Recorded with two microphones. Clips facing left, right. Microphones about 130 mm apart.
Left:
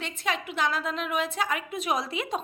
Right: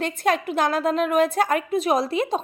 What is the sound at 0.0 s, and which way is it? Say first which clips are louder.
A woman's voice: right 9 dB; 45° right (ahead or behind).